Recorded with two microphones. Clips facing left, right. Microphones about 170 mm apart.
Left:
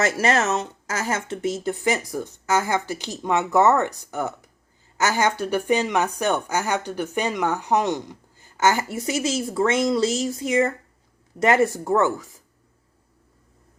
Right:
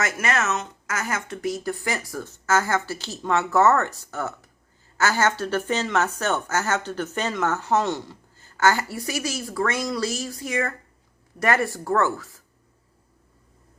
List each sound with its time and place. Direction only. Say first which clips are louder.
0.0 s a woman's voice: left 4 dB; 30° left (ahead or behind)